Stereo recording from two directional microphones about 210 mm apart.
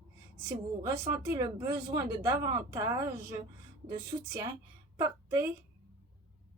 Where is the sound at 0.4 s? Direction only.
15° right (ahead or behind).